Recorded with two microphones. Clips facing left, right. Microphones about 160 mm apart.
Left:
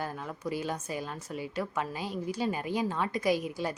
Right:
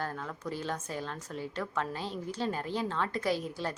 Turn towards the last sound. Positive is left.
turn(degrees=10)  # may be behind; listen again after turning